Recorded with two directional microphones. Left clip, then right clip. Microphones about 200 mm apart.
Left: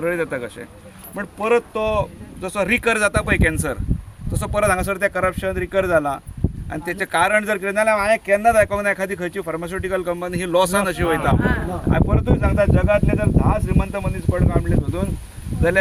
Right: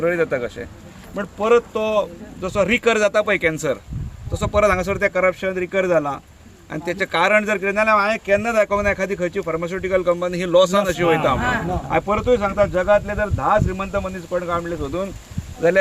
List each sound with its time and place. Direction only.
0.0 s speech: 5° left (ahead or behind)
11.3 s speech: 50° left (ahead or behind)
11.9 s speech: 15° left (ahead or behind)